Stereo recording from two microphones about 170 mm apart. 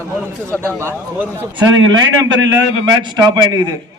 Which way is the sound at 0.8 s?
15° right (ahead or behind).